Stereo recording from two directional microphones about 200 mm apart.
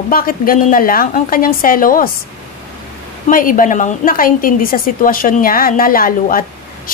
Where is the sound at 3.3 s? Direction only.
45° left (ahead or behind).